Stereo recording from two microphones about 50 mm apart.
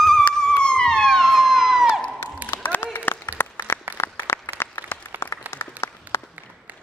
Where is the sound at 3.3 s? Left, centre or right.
Left.